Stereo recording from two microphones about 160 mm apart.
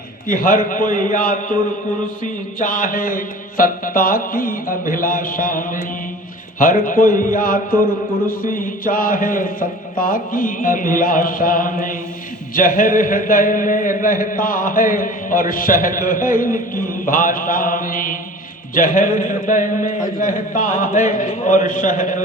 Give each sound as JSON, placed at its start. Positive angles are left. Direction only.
{"t": 0.3, "sound": "a man's voice", "side_deg": 60}